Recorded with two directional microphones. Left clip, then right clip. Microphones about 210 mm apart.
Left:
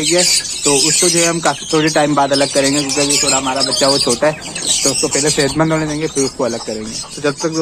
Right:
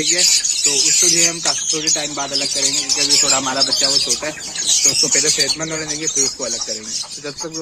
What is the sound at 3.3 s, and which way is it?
Speech, 10° right (ahead or behind).